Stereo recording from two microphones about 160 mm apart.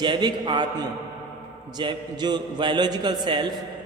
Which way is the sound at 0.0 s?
25° right (ahead or behind).